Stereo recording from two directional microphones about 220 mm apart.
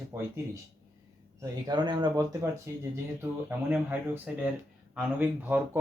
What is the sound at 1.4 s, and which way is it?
Speech, 20° right (ahead or behind).